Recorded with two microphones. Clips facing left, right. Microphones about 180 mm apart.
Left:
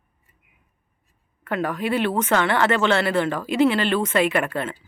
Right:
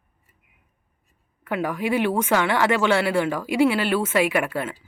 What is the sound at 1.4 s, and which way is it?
Speech, 10° right (ahead or behind).